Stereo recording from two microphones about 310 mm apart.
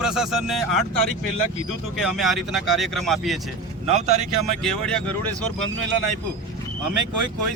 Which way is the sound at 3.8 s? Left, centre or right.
Right.